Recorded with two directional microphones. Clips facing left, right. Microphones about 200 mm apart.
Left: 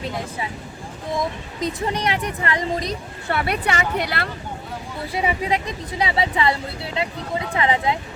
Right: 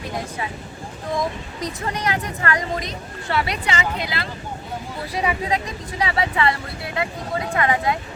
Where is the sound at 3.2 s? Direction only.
55° left (ahead or behind).